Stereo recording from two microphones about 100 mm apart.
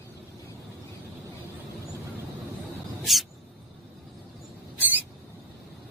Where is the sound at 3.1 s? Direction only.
Centre (ahead or behind).